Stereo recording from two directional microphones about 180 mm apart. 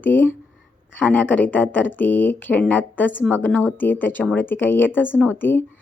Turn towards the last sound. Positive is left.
turn(degrees=10)  # may be behind; listen again after turning